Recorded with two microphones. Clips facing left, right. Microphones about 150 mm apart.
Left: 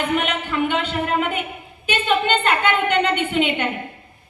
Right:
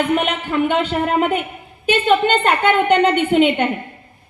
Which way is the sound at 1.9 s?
40° right (ahead or behind).